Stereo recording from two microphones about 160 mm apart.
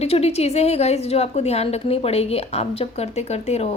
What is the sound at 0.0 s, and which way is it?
A woman's voice, 40° left (ahead or behind).